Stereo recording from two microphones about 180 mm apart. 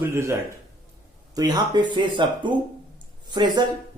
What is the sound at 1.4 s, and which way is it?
Speech, 25° right (ahead or behind).